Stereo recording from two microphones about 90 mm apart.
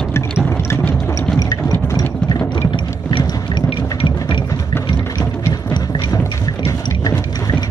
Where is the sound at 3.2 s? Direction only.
55° left (ahead or behind).